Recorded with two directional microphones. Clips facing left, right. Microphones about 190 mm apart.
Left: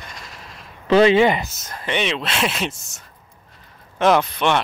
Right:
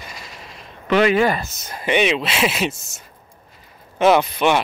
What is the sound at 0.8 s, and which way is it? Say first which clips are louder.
Speech: left 3 dB; 30° left (ahead or behind).